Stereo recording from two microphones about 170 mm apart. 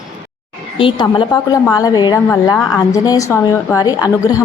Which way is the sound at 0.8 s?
30° left (ahead or behind).